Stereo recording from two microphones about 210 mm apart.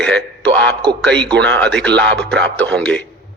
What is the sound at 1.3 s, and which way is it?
Speech, 55° right (ahead or behind).